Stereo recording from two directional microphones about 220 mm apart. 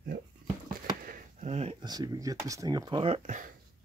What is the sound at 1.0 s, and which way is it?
Speech, 35° right (ahead or behind).